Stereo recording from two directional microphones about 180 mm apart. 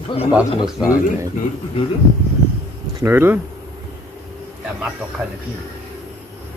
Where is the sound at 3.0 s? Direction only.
15° right (ahead or behind).